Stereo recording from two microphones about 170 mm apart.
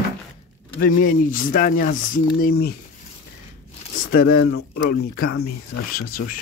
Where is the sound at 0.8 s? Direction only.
60° left (ahead or behind).